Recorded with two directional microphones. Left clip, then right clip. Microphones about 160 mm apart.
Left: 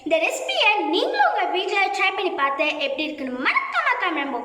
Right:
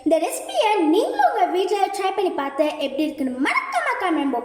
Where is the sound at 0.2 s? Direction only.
55° right (ahead or behind).